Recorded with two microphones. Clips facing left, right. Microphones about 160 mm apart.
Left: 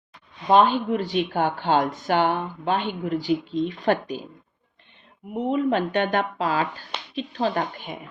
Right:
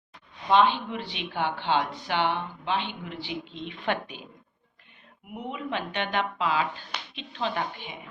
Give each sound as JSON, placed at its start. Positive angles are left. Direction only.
{"t": 0.4, "sound": "speech", "side_deg": 45}
{"t": 5.3, "sound": "speech", "side_deg": 35}